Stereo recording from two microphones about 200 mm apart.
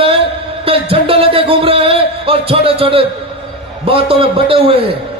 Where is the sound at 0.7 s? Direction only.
25° right (ahead or behind).